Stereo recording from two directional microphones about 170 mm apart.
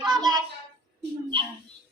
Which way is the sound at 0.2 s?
20° right (ahead or behind).